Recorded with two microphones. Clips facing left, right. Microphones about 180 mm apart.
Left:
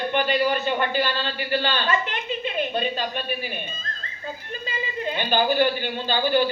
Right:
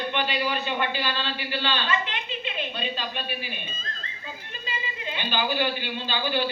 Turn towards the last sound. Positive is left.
turn(degrees=45)  # may be behind; listen again after turning